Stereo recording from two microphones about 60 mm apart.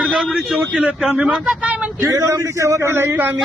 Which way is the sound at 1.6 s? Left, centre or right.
Right.